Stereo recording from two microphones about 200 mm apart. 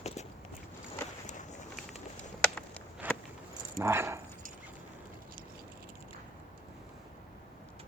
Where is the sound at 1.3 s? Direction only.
35° left (ahead or behind).